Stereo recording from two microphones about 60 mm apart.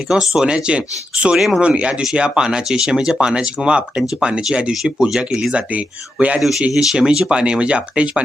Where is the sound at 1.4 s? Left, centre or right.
Centre.